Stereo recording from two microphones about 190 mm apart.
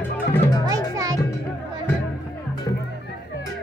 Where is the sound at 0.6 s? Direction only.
20° right (ahead or behind).